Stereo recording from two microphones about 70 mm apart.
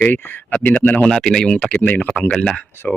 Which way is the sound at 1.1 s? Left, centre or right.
Centre.